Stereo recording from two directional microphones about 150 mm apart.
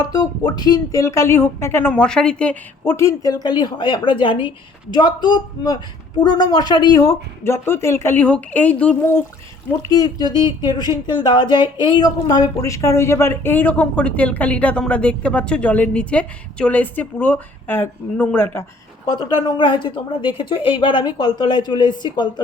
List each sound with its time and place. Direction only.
0.0 s speech: 25° left (ahead or behind)
9.9 s speech: 25° left (ahead or behind)
19.1 s speech: 30° left (ahead or behind)